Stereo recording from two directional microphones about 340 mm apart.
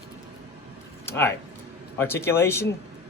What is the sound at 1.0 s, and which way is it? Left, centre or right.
Speech, centre.